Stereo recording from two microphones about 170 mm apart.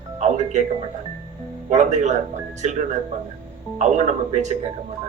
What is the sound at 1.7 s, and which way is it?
Speech, 45° right (ahead or behind).